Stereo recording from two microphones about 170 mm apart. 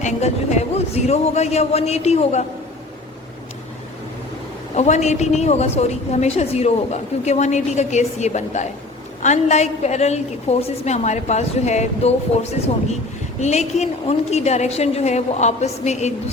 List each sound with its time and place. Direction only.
0.0 s a woman's voice: 40° left (ahead or behind)
4.7 s a woman's voice: 40° left (ahead or behind)